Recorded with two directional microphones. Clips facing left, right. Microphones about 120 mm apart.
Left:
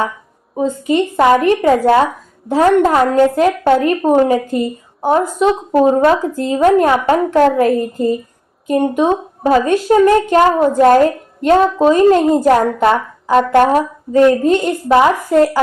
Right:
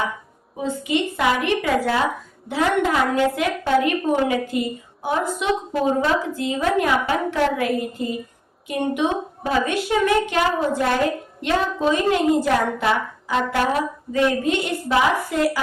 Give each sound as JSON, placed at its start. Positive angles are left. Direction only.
{"t": 1.1, "sound": "a woman's voice", "side_deg": 45}